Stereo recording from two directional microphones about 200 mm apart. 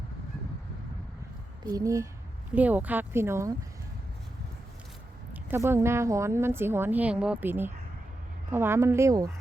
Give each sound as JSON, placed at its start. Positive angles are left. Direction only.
{"t": 1.6, "sound": "a woman's voice", "side_deg": -15}
{"t": 5.3, "sound": "a woman's voice", "side_deg": -10}